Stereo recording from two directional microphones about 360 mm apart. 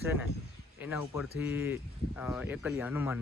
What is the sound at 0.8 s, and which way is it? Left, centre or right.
Speech, centre.